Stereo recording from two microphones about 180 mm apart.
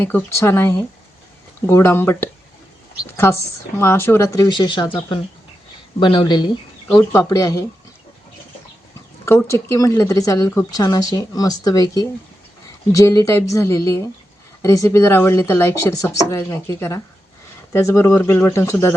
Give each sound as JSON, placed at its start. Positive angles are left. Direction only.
{"t": 0.0, "sound": "a woman's voice", "side_deg": 10}
{"t": 6.9, "sound": "speech", "side_deg": 15}
{"t": 9.2, "sound": "a woman's voice", "side_deg": 15}